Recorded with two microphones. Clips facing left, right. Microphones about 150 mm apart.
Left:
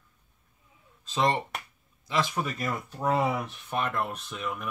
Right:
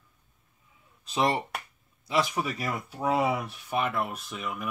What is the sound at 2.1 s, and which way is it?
Speech, 10° right (ahead or behind).